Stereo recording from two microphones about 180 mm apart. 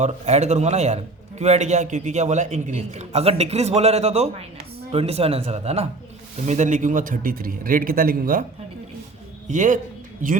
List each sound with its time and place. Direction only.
0.0 s a man's voice: 40° right (ahead or behind)
9.5 s a man's voice: 45° right (ahead or behind)